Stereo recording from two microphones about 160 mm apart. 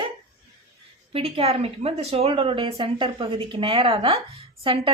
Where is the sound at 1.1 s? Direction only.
40° right (ahead or behind).